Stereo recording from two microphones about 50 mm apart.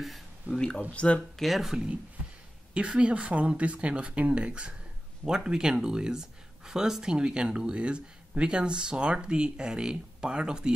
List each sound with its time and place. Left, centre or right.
0.0 s a sound: centre
0.9 s speech: left
1.4 s speech: centre
2.7 s speech: right